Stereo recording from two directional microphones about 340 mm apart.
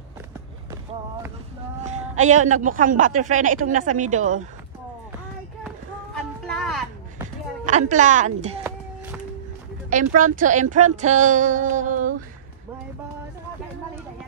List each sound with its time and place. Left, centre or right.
1.9 s speech: right
6.4 s a sound: centre
7.6 s speech: right
9.8 s speech: right